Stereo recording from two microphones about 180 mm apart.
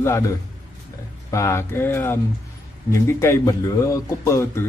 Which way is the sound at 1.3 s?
15° left (ahead or behind).